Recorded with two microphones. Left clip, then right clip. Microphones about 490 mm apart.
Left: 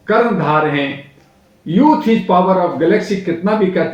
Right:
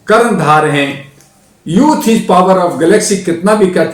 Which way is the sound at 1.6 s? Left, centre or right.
Left.